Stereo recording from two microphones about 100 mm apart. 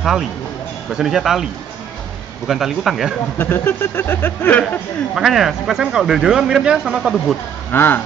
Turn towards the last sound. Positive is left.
turn(degrees=20)  # may be behind; listen again after turning